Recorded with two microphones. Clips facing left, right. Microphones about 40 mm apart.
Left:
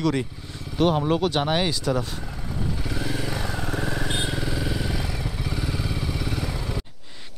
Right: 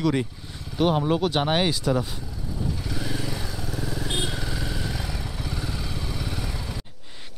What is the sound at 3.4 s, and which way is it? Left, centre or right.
Vehicle, left.